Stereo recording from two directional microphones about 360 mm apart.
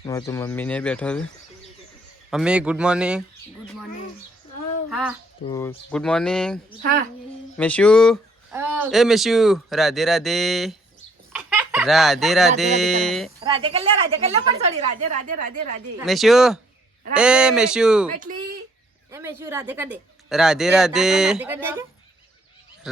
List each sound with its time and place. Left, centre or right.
0.0 s speech: centre
2.3 s speech: centre
4.9 s speech: centre
11.3 s chicken: centre
13.0 s speech: centre
13.4 s speech: centre
16.0 s speech: centre
18.1 s speech: right
19.1 s speech: centre